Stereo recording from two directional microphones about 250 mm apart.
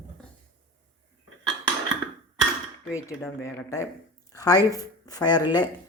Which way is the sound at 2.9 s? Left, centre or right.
Centre.